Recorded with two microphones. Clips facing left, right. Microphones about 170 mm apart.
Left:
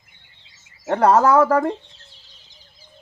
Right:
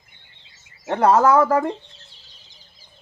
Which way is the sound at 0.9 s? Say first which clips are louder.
Left 1 dB; centre (ahead or behind).